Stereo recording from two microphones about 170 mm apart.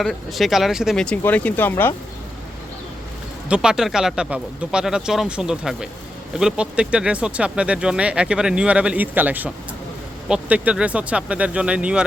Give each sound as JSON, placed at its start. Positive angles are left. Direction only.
{"t": 0.0, "sound": "speech", "side_deg": 0}
{"t": 3.5, "sound": "speech", "side_deg": -5}